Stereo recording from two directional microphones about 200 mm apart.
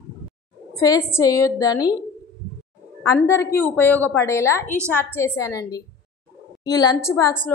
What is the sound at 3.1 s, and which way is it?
A woman's voice, 15° left (ahead or behind).